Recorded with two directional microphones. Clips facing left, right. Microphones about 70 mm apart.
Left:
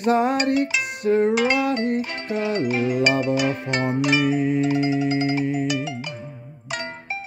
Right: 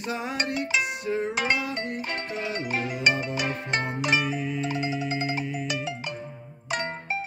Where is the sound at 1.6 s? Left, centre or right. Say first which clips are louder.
Left 9 dB; left.